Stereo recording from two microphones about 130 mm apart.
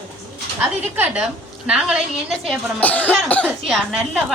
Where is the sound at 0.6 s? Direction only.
10° right (ahead or behind).